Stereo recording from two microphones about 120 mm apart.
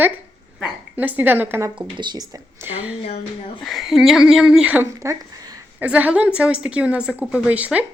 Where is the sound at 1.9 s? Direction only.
40° right (ahead or behind).